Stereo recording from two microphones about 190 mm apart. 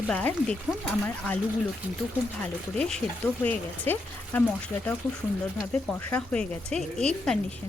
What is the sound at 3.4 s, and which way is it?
Speech, 10° left (ahead or behind).